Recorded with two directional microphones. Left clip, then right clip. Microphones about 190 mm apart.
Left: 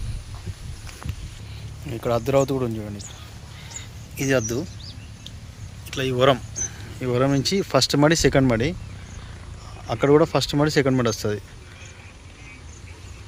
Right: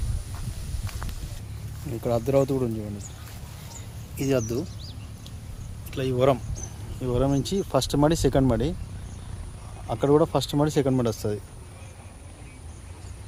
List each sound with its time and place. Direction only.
1.9 s speech: centre (ahead or behind)
4.2 s speech: 5° left (ahead or behind)
5.9 s speech: 5° left (ahead or behind)
9.8 s speech: 5° left (ahead or behind)